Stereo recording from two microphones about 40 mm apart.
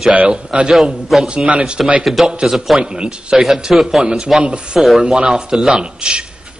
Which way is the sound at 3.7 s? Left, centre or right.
Centre.